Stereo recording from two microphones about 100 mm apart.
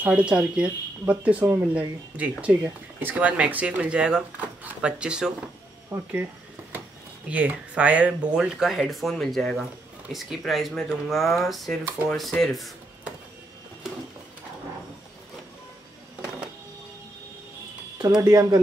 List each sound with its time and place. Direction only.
0.0 s speech: 10° right (ahead or behind)
5.9 s speech: 30° right (ahead or behind)
7.2 s speech: 10° right (ahead or behind)
17.9 s speech: 35° right (ahead or behind)